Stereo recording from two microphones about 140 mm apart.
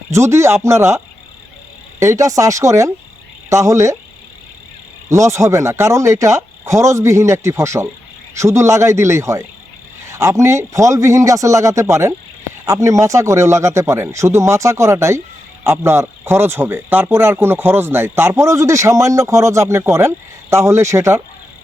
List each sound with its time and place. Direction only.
0.1 s speech: 20° right (ahead or behind)
5.0 s speech: 20° right (ahead or behind)